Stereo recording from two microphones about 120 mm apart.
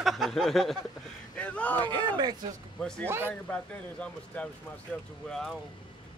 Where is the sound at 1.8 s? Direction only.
40° right (ahead or behind).